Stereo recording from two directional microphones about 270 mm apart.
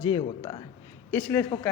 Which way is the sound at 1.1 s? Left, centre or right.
Centre.